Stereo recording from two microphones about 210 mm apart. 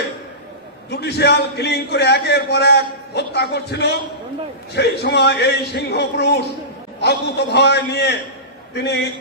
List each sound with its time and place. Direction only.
0.9 s a man's voice: 55° left (ahead or behind)